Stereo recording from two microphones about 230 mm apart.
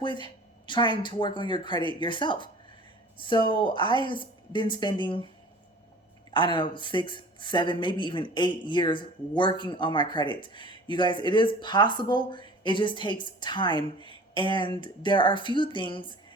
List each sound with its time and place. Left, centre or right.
0.0 s a woman's voice: centre
6.3 s speech: left